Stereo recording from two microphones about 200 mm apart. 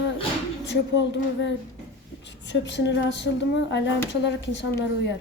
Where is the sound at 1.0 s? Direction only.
60° left (ahead or behind).